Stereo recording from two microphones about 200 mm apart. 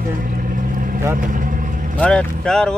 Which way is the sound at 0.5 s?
45° right (ahead or behind).